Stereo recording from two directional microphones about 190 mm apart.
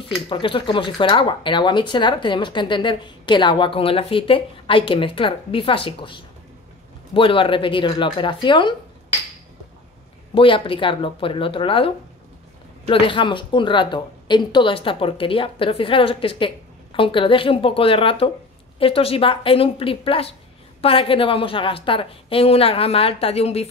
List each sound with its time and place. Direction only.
0.3 s speech: 25° left (ahead or behind)
10.3 s speech: 30° left (ahead or behind)